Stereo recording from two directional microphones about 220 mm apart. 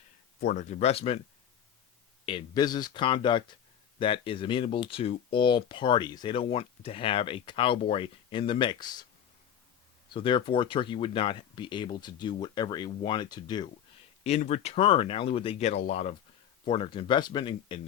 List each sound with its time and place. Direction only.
0.4 s speech: 30° left (ahead or behind)
2.2 s speech: 20° left (ahead or behind)
10.1 s speech: 20° left (ahead or behind)
14.3 s speech: 30° left (ahead or behind)